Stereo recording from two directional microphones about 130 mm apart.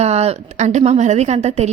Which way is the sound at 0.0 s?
55° right (ahead or behind).